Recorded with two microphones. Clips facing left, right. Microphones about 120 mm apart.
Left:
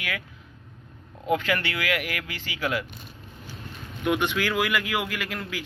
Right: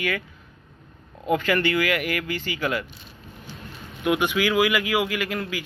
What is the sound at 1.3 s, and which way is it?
Speech, centre (ahead or behind).